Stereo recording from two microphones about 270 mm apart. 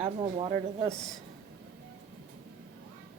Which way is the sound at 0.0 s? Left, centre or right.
Right.